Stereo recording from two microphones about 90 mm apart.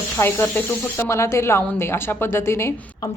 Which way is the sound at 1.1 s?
35° left (ahead or behind).